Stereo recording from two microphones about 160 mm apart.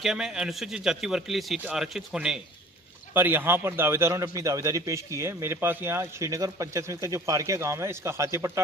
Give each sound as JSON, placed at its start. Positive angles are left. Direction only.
{"t": 0.0, "sound": "a man's voice", "side_deg": -5}